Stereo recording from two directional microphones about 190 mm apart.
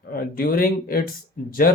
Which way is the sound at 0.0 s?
50° left (ahead or behind).